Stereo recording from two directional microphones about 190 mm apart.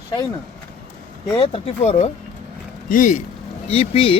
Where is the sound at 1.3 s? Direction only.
30° left (ahead or behind).